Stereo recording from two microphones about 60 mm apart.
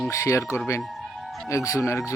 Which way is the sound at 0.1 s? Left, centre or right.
Left.